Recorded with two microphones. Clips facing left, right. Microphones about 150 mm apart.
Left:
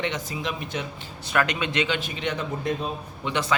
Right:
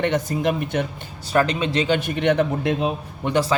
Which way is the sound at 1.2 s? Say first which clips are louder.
Right 5 dB; 30° right (ahead or behind).